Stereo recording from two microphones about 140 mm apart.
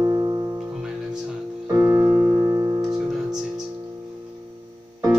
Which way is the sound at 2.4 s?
25° right (ahead or behind).